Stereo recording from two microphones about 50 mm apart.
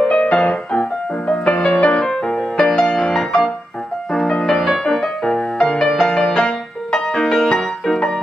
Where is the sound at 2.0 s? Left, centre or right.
Centre.